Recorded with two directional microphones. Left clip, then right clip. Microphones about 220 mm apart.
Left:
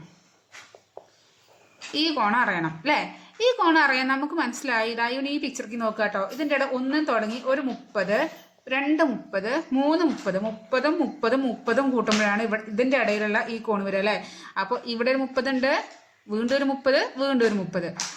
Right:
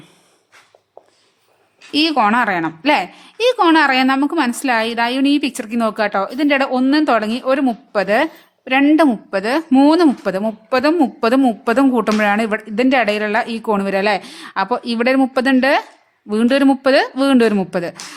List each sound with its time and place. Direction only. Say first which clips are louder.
1.9 s a woman's voice: right 9 dB; 45° right (ahead or behind)